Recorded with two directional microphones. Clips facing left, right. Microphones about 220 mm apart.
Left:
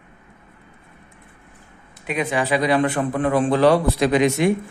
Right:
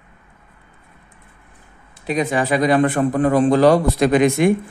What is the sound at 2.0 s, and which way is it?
A man's voice, 40° right (ahead or behind).